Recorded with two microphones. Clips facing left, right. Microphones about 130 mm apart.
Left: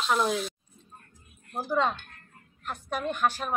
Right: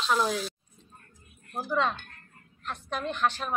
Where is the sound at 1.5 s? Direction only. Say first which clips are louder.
Left 1 dB; 20° left (ahead or behind).